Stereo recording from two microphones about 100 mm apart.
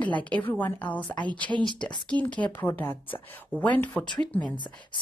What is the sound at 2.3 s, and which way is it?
Speech, 15° left (ahead or behind).